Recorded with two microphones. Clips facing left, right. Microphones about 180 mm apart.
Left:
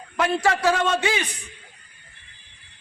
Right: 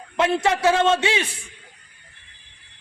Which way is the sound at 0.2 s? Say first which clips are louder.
Right 2 dB; 25° right (ahead or behind).